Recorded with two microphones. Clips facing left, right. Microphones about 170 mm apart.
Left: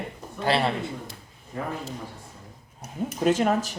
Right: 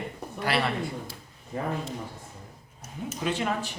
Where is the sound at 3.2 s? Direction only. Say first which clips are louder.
Left 7 dB; 45° left (ahead or behind).